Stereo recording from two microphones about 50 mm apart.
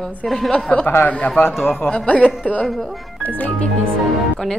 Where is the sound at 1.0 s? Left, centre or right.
Left.